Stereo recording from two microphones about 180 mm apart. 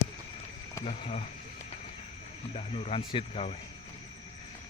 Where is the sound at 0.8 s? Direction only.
35° left (ahead or behind).